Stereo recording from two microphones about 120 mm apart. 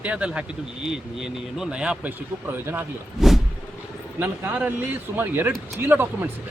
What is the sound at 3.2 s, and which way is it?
Vehicle, 5° right (ahead or behind).